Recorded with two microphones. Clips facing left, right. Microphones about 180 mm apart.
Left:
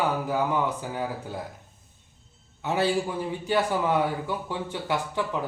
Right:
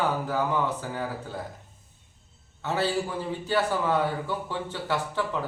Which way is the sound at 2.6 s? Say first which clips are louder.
Left 2 dB; 15° left (ahead or behind).